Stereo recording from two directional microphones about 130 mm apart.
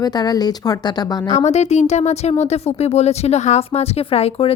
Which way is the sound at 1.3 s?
60° left (ahead or behind).